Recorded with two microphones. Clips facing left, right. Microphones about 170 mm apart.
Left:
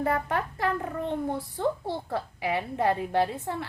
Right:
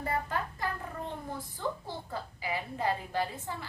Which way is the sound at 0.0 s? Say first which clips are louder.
Left 6 dB; 65° left (ahead or behind).